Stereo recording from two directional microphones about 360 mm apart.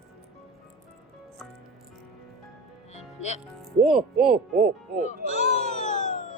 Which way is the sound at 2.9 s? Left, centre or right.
Centre.